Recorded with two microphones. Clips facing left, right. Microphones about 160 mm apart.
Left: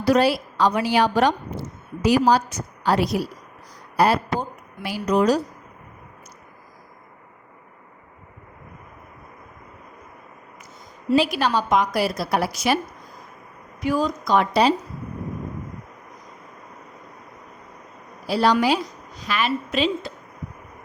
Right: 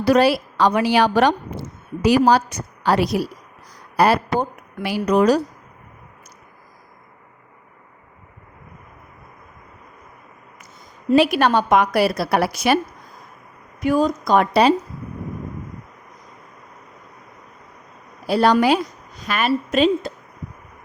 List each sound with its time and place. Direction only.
0.0 s a woman's voice: 65° right (ahead or behind)
11.1 s a woman's voice: 60° right (ahead or behind)
13.8 s a woman's voice: 50° right (ahead or behind)
18.3 s a woman's voice: 55° right (ahead or behind)